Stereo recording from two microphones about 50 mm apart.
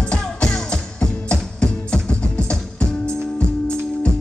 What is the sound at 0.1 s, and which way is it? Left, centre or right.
Music, left.